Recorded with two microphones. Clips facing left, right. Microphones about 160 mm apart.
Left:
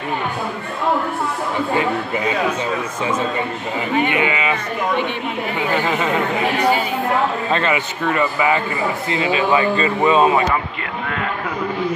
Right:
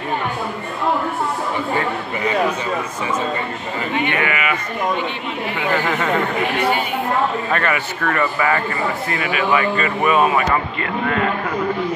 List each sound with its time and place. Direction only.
4.1 s speech: 20° left (ahead or behind)
5.9 s speech: 15° left (ahead or behind)
7.5 s speech: 20° left (ahead or behind)
10.5 s speech: 5° left (ahead or behind)